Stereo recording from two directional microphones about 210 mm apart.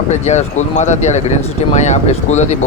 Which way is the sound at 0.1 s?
35° left (ahead or behind).